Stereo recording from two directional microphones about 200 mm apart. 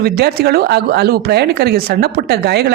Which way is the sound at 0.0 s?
50° right (ahead or behind).